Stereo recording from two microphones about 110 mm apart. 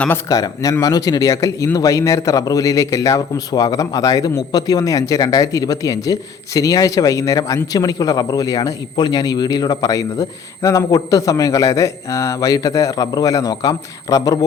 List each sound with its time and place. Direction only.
0.3 s speech: 35° left (ahead or behind)